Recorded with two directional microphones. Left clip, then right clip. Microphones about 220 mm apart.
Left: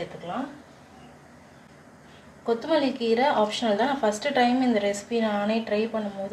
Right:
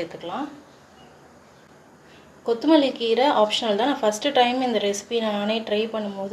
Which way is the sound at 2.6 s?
30° right (ahead or behind).